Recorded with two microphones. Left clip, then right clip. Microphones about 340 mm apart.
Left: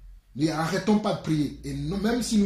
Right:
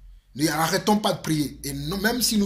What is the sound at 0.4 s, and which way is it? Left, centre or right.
Speech, right.